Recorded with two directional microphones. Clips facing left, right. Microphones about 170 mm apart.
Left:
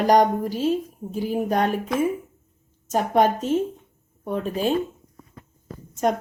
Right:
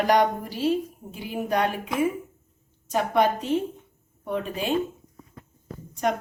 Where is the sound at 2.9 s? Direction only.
45° left (ahead or behind).